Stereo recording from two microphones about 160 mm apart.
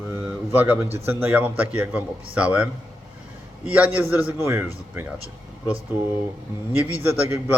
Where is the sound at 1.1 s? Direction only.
15° right (ahead or behind).